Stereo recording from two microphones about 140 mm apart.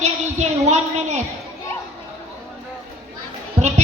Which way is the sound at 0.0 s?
55° right (ahead or behind).